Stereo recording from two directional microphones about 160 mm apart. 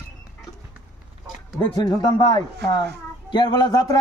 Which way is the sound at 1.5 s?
25° left (ahead or behind).